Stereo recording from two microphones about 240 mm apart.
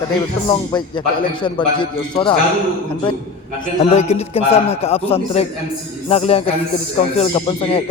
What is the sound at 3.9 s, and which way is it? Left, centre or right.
A man's voice, left.